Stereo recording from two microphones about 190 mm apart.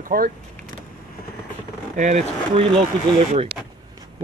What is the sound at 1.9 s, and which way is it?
Speech, 40° right (ahead or behind).